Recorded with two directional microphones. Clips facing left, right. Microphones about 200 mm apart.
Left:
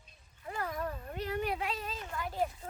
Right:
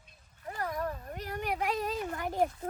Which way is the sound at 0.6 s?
40° right (ahead or behind).